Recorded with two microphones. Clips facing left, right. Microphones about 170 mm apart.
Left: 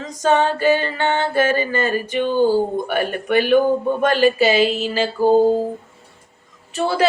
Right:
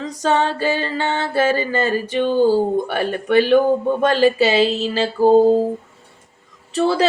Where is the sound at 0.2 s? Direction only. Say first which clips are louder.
Left 2 dB; 35° right (ahead or behind).